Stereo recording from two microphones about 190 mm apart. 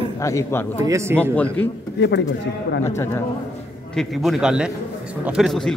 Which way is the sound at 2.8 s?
15° left (ahead or behind).